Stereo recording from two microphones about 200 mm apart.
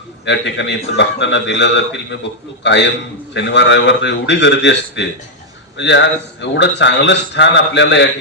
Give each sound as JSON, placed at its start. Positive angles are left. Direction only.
{"t": 0.3, "sound": "a man's voice", "side_deg": 65}